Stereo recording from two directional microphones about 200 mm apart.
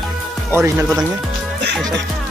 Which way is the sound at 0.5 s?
15° right (ahead or behind).